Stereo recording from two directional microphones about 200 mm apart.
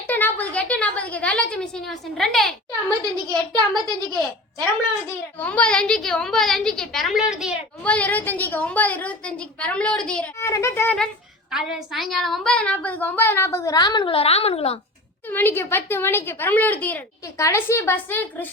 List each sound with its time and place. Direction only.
0.1 s a child's voice: 10° left (ahead or behind)
3.0 s a child's voice: 20° right (ahead or behind)
5.0 s a child's voice: 5° left (ahead or behind)
7.9 s a woman's voice: 10° left (ahead or behind); by 14.8 s 30° left (ahead or behind)
15.3 s a woman's voice: 10° left (ahead or behind)